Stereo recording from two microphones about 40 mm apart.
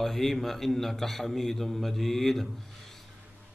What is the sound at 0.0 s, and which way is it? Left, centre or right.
A man's voice, centre.